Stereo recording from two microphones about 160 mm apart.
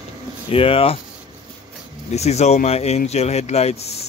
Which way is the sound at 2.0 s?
45° left (ahead or behind).